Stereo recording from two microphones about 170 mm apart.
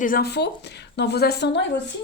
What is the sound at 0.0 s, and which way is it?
A woman's voice, 65° left (ahead or behind).